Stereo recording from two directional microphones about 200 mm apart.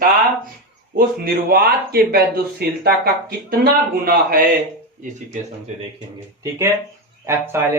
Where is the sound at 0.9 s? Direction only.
50° right (ahead or behind).